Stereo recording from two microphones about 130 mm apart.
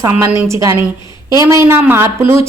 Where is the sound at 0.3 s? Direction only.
20° right (ahead or behind).